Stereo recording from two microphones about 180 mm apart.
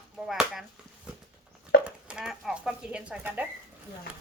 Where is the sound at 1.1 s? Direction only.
5° right (ahead or behind).